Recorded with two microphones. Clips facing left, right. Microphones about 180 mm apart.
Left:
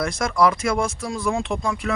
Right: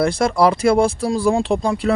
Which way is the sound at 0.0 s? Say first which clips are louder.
Right 4 dB; 30° right (ahead or behind).